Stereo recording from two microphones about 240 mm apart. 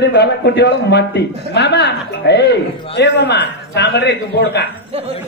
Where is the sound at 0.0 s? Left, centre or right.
Left.